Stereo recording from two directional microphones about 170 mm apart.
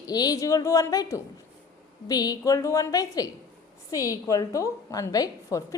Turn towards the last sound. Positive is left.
turn(degrees=20)  # may be behind; listen again after turning